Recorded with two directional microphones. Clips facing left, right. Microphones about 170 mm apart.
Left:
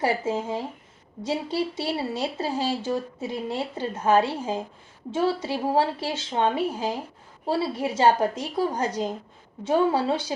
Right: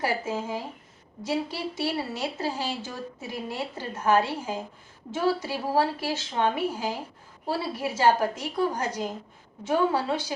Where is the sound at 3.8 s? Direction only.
25° left (ahead or behind).